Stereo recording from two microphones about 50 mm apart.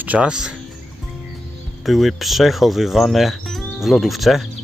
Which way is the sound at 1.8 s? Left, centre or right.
Centre.